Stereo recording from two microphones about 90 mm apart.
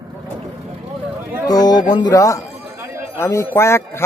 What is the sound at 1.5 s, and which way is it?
Speech, 45° left (ahead or behind).